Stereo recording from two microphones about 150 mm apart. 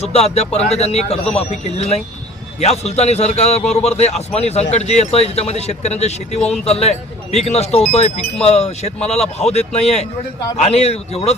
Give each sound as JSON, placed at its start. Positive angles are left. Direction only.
{"t": 0.0, "sound": "speech", "side_deg": 45}